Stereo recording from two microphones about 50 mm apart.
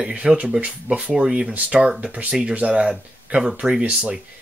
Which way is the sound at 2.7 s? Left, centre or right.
Centre.